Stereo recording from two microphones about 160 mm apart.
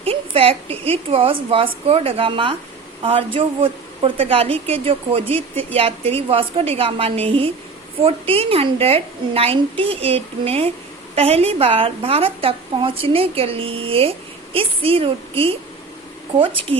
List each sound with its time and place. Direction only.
0.0 s a woman's voice: 35° right (ahead or behind)